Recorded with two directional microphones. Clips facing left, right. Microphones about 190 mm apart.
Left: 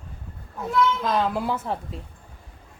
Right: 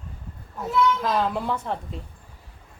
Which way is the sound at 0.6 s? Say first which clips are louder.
Even; 5° right (ahead or behind).